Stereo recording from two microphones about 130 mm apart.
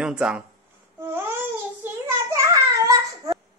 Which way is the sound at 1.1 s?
20° right (ahead or behind).